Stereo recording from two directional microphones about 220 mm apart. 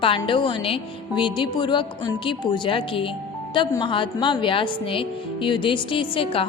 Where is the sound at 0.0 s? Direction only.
25° left (ahead or behind).